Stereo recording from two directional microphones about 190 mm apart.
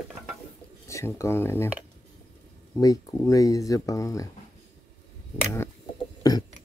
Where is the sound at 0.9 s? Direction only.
15° left (ahead or behind).